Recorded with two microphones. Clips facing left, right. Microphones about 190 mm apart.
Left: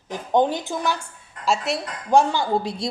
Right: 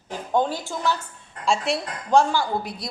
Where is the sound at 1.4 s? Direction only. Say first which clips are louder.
Even; centre (ahead or behind).